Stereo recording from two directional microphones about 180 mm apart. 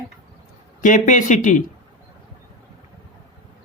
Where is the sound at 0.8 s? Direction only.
45° left (ahead or behind).